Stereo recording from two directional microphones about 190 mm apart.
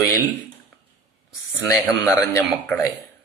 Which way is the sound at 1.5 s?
15° left (ahead or behind).